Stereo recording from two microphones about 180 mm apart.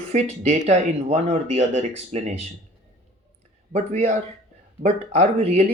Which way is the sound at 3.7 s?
40° right (ahead or behind).